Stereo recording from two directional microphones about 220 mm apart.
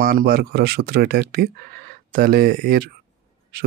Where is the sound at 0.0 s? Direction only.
40° right (ahead or behind).